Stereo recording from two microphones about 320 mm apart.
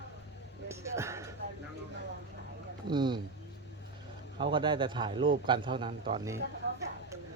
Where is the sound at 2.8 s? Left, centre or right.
Centre.